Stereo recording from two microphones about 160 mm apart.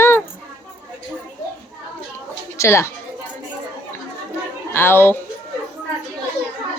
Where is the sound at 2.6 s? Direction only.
15° left (ahead or behind).